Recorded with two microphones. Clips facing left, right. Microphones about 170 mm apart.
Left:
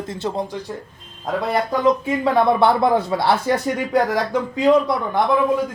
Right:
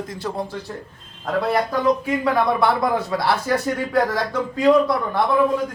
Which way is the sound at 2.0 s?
25° left (ahead or behind).